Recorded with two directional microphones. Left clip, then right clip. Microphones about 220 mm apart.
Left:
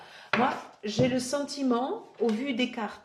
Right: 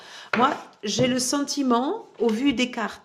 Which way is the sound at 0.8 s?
45° right (ahead or behind).